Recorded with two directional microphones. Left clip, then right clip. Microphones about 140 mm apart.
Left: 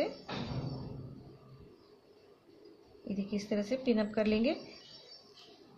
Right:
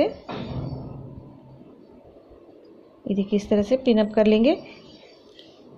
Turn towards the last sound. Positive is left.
turn(degrees=-45)  # may be behind; listen again after turning